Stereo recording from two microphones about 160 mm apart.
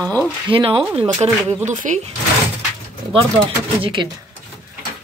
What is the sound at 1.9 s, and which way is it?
Speech, 55° right (ahead or behind).